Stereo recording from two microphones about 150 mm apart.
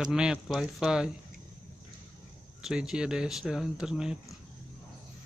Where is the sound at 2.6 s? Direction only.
5° right (ahead or behind).